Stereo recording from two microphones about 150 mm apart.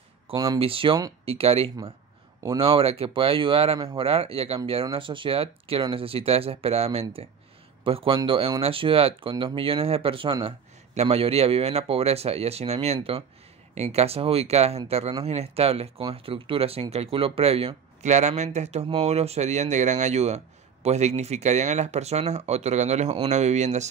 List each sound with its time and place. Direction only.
0.6 s a man's voice: 35° right (ahead or behind)